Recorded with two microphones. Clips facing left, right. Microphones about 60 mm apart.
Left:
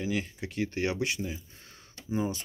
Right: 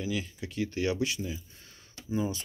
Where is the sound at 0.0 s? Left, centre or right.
Left.